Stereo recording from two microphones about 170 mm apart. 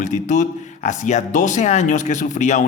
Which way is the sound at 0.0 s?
45° left (ahead or behind).